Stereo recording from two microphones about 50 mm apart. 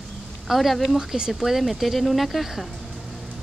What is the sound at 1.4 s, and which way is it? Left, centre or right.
Speech, centre.